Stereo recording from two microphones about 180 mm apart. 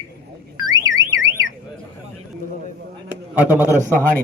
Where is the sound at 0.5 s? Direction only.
20° right (ahead or behind).